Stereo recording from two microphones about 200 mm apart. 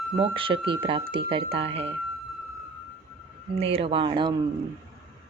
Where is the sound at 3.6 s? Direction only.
30° right (ahead or behind).